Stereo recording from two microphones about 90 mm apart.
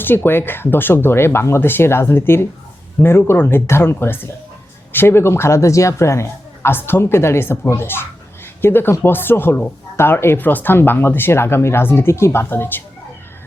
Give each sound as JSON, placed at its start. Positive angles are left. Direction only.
{"t": 0.0, "sound": "speech", "side_deg": 25}